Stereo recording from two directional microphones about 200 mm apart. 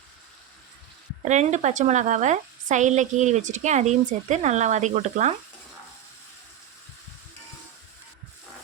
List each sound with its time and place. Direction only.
1.3 s speech: 35° right (ahead or behind)